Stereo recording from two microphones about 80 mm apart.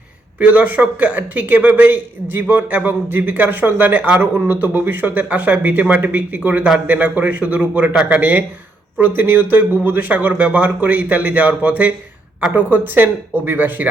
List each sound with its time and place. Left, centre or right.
0.3 s a man's voice: right